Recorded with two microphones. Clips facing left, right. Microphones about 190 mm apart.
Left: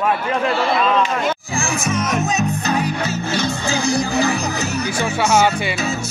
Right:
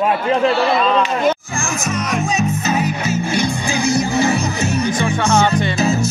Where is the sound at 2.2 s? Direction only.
Centre (ahead or behind); by 4.1 s 15° right (ahead or behind).